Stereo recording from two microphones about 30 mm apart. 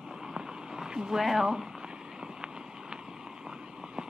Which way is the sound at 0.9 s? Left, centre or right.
Centre.